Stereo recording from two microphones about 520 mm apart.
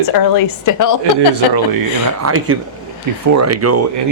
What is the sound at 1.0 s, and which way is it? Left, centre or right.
Speech, right.